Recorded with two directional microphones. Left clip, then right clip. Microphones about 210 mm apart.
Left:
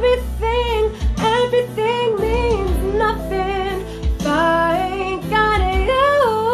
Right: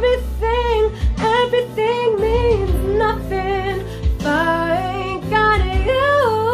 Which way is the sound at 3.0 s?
Centre (ahead or behind).